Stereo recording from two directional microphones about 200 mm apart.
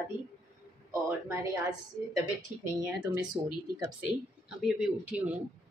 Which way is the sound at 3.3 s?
20° right (ahead or behind).